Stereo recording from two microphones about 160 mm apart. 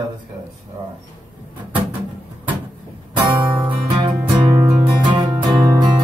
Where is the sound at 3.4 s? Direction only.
30° right (ahead or behind).